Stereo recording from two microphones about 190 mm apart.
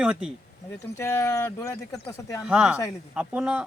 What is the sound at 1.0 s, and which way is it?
Speech, 15° left (ahead or behind).